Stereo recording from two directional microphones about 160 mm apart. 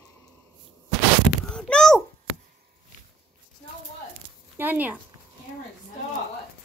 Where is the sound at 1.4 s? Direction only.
5° left (ahead or behind).